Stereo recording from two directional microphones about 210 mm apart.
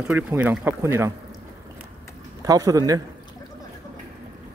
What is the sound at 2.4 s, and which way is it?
Speech, 15° right (ahead or behind).